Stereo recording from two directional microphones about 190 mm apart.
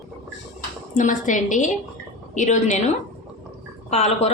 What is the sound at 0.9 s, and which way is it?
A woman's voice, 45° left (ahead or behind).